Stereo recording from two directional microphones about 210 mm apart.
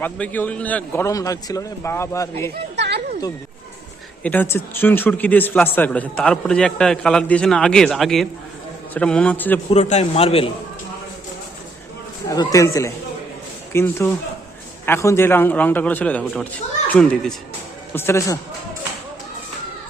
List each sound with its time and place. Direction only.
0.0 s a man's voice: 10° left (ahead or behind)
2.7 s a sound: 55° right (ahead or behind)
4.2 s a man's voice: 10° left (ahead or behind)
9.7 s a man's voice: 30° left (ahead or behind)
12.3 s a man's voice: 15° left (ahead or behind)